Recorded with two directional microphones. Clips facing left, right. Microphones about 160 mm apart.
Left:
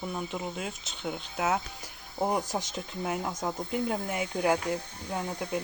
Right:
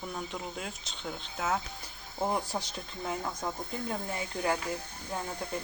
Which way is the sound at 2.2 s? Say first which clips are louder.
Left 3 dB; 15° left (ahead or behind).